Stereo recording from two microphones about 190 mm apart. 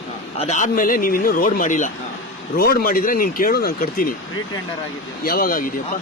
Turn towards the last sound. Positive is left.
turn(degrees=50)  # may be behind; listen again after turning